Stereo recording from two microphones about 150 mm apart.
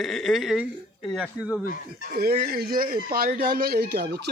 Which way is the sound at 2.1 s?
90° right.